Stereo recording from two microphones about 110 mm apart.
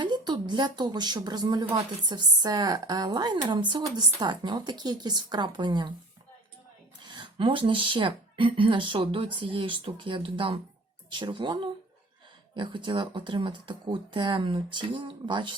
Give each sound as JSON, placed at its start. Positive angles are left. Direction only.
{"t": 0.0, "sound": "speech", "side_deg": -40}
{"t": 7.0, "sound": "speech", "side_deg": -45}